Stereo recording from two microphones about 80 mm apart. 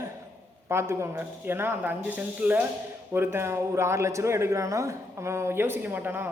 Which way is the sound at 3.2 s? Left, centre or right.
Right.